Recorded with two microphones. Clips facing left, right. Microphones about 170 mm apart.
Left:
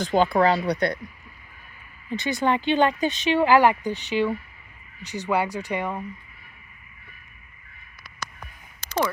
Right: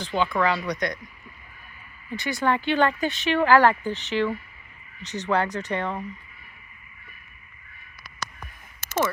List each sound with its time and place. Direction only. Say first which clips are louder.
0.0 s speech: left 4 dB; 40° left (ahead or behind)
2.0 s speech: left 1 dB; 20° left (ahead or behind)